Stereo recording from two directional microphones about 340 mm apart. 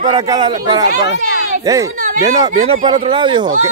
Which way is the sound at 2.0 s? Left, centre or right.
Right.